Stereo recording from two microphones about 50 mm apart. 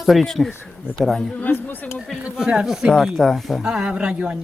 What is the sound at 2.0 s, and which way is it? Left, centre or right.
Speech, centre.